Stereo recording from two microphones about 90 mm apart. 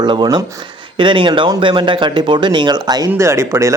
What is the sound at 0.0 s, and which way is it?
Speech, 60° right (ahead or behind).